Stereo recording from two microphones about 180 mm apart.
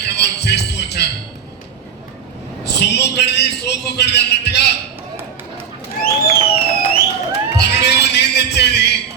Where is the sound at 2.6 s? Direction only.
70° left (ahead or behind).